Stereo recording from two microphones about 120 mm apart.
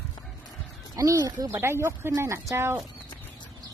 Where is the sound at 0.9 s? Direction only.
30° right (ahead or behind).